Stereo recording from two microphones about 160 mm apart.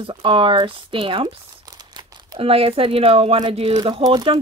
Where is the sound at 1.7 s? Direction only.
25° right (ahead or behind).